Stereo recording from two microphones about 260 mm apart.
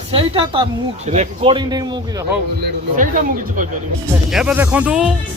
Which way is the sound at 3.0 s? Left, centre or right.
Right.